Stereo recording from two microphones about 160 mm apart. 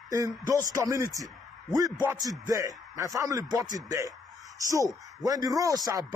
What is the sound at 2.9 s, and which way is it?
Speech, 20° right (ahead or behind).